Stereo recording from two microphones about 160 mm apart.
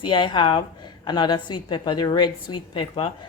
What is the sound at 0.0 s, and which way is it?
A woman's voice, 30° left (ahead or behind).